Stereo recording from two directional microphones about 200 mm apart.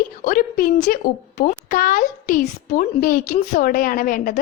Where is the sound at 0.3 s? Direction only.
45° left (ahead or behind).